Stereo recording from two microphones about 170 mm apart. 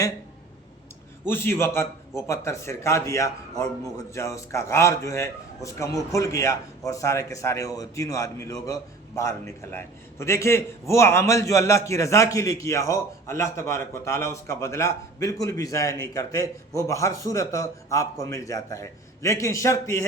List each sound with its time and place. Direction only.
1.3 s a man's voice: 15° left (ahead or behind)